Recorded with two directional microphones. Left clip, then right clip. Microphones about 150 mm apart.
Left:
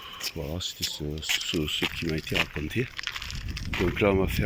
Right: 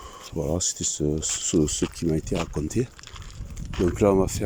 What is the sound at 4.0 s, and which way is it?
Speech, 30° right (ahead or behind).